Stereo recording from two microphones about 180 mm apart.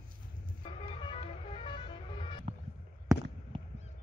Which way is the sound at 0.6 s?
30° left (ahead or behind).